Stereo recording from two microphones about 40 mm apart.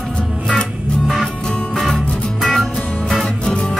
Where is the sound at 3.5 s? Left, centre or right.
Left.